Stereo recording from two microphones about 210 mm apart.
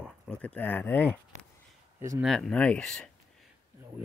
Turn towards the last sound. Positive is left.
turn(degrees=5)  # may be behind; listen again after turning